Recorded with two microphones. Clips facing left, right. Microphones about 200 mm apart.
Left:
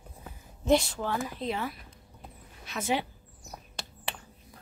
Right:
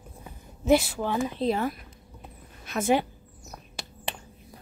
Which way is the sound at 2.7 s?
50° right (ahead or behind).